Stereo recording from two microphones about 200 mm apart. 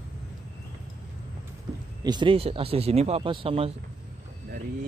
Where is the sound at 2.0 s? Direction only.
25° right (ahead or behind).